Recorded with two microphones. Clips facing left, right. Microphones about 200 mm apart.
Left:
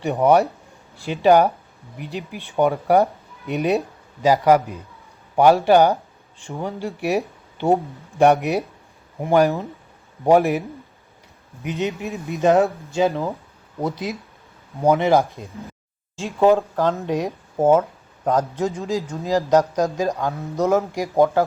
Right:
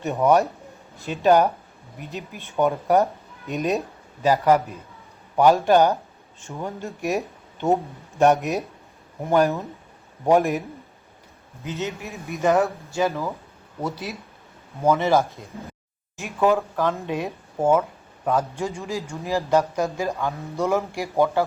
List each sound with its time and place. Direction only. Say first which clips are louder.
0.0 s a man's voice: left 2 dB; 15° left (ahead or behind)
11.6 s speech: left 5 dB; 15° left (ahead or behind)
16.2 s a man's voice: left 4 dB; 25° left (ahead or behind)